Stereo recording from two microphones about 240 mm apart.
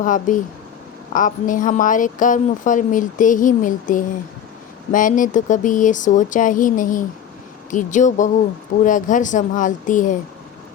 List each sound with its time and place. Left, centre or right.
0.0 s a woman's voice: left